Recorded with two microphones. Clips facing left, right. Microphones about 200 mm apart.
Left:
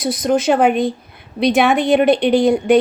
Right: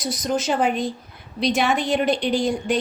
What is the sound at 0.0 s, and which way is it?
A woman's voice, 60° left (ahead or behind).